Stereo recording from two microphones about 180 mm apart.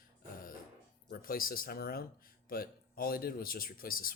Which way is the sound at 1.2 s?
55° left (ahead or behind).